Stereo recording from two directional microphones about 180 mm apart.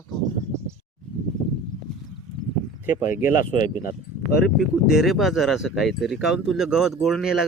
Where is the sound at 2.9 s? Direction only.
10° right (ahead or behind).